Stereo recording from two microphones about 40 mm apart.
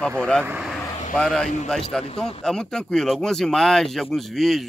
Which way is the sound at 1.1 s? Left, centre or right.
Centre.